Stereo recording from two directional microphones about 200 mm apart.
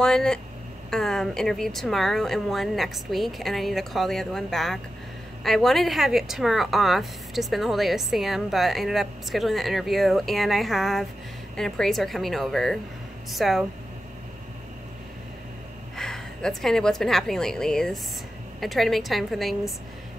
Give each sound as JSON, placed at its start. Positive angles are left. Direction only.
{"t": 0.0, "sound": "a woman's voice", "side_deg": 5}
{"t": 16.0, "sound": "a woman's voice", "side_deg": 5}